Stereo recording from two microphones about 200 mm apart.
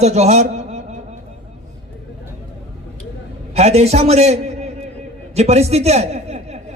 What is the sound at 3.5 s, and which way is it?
A man's voice, 30° right (ahead or behind).